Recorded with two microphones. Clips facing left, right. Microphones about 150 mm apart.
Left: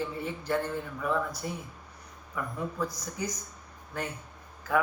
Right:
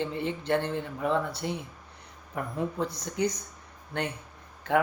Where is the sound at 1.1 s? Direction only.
30° right (ahead or behind).